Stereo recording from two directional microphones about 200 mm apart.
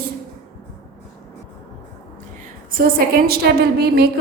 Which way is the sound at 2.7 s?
50° right (ahead or behind).